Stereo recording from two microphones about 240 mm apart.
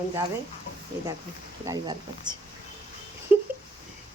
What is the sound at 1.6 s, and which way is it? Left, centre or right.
Speech, centre.